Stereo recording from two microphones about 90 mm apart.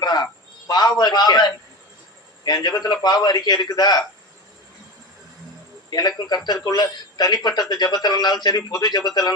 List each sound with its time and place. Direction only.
0.0 s a sound: 50° left (ahead or behind)
0.7 s a man's voice: 50° left (ahead or behind)
5.9 s speech: 50° left (ahead or behind)